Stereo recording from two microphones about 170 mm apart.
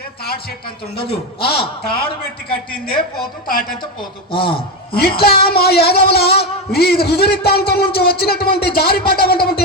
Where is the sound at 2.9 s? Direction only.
60° left (ahead or behind).